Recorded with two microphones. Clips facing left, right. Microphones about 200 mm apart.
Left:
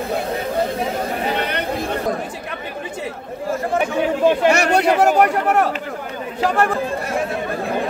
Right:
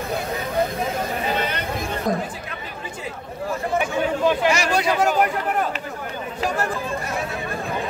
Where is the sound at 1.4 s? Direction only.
60° left (ahead or behind).